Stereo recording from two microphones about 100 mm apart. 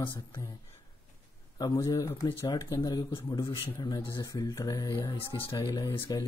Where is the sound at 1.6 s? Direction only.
35° left (ahead or behind).